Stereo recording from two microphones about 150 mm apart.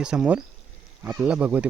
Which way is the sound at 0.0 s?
5° right (ahead or behind).